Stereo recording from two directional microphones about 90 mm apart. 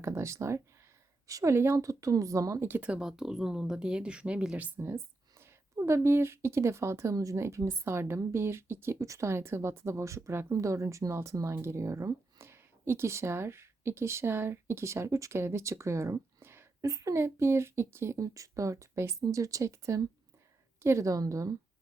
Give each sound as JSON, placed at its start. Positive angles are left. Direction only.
{"t": 0.0, "sound": "speech", "side_deg": -30}
{"t": 2.6, "sound": "speech", "side_deg": -20}
{"t": 3.0, "sound": "speech", "side_deg": -5}
{"t": 5.4, "sound": "speech", "side_deg": -30}